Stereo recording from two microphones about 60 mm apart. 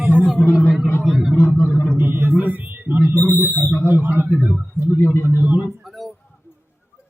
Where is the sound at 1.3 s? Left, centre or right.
Left.